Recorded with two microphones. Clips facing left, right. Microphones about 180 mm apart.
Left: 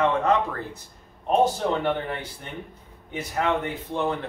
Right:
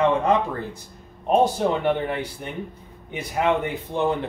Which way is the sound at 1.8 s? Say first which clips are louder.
Right 4 dB; 15° right (ahead or behind).